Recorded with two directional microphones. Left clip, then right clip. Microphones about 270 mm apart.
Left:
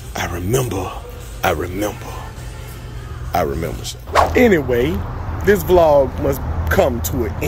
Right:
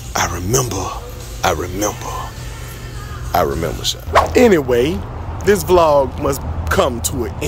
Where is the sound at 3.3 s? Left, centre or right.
Centre.